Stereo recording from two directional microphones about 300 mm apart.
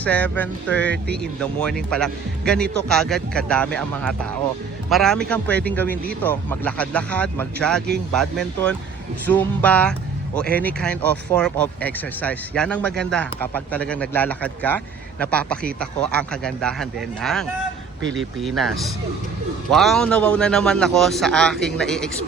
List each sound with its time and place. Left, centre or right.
0.0 s speech: centre
18.0 s speech: right
18.4 s speech: centre